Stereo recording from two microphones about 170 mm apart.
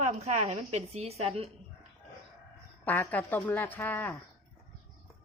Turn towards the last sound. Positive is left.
turn(degrees=10)  # may be behind; listen again after turning